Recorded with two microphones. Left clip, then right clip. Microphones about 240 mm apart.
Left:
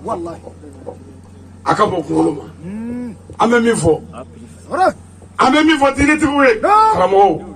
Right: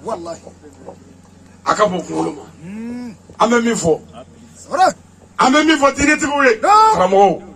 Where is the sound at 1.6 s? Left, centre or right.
Right.